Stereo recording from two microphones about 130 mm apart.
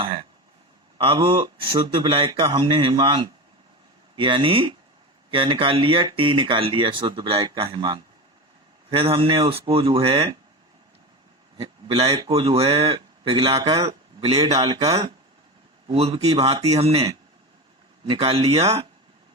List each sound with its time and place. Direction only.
0.0 s throat clearing: 45° right (ahead or behind)
0.9 s speech: 40° right (ahead or behind)
11.5 s a man's voice: 50° right (ahead or behind)
14.5 s speech: 30° right (ahead or behind)
15.9 s speech: 50° right (ahead or behind)
18.1 s speech: 45° right (ahead or behind)